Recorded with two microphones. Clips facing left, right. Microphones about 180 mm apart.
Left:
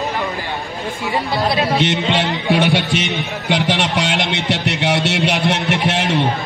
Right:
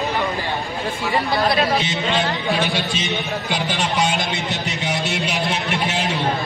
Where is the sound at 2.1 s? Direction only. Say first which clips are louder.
Left 2 dB; 65° left (ahead or behind).